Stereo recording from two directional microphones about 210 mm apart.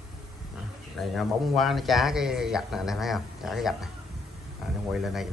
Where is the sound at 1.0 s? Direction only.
Centre (ahead or behind).